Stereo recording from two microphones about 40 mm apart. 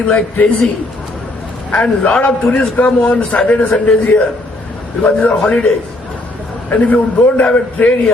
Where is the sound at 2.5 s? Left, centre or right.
Left.